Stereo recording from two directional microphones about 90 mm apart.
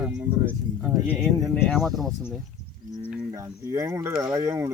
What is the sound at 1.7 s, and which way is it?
Speech, centre (ahead or behind).